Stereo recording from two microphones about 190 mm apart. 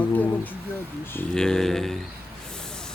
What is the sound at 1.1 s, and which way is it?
Speech, 5° left (ahead or behind).